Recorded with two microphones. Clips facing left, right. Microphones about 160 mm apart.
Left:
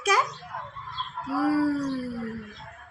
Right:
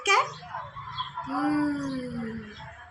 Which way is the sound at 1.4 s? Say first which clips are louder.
Left 2 dB; 15° right (ahead or behind).